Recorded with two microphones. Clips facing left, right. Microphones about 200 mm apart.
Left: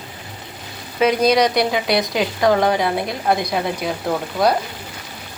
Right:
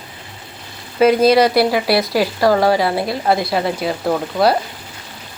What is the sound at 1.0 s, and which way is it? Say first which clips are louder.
Speech: right 4 dB; 5° right (ahead or behind).